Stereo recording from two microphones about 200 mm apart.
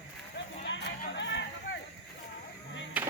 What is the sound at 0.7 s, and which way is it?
Speech, 60° left (ahead or behind).